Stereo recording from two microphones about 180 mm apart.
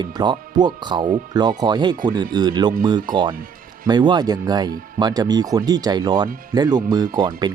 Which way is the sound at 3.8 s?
25° right (ahead or behind).